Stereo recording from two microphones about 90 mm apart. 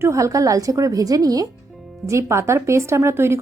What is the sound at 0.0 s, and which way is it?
Speech, 35° right (ahead or behind).